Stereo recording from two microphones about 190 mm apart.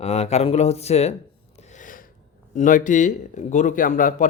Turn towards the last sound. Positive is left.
turn(degrees=45)  # may be behind; listen again after turning